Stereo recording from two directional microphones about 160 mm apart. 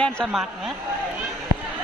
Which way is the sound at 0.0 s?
Centre (ahead or behind).